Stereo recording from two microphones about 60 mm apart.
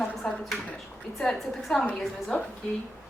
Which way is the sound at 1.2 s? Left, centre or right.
Centre.